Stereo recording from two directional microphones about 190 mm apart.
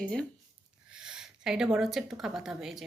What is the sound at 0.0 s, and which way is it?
Speech, 5° left (ahead or behind).